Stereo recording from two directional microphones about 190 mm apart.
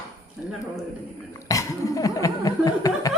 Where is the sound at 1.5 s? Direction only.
15° left (ahead or behind).